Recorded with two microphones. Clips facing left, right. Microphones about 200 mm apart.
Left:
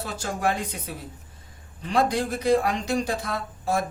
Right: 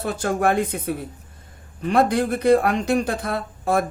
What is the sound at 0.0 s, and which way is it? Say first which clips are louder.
Speech: right 6 dB; 55° right (ahead or behind).